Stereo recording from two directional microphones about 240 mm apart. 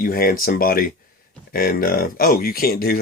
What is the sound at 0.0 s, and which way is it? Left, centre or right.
Speech, left.